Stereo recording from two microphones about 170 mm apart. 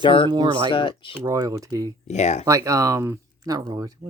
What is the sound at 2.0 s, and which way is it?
Speech, 40° left (ahead or behind).